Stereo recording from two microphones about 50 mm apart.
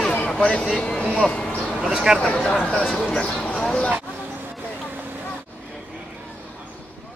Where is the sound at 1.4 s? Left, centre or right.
Left.